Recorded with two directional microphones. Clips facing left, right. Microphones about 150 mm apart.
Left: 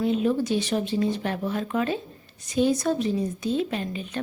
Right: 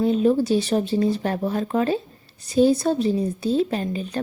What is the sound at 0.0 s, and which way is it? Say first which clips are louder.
Speech: right 4 dB; 35° right (ahead or behind).